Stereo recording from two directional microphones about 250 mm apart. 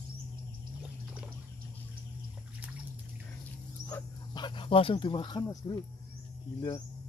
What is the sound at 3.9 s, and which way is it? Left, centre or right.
Speech, centre.